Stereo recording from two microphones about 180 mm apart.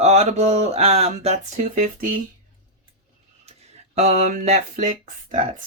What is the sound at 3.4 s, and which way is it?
Speech, 35° right (ahead or behind).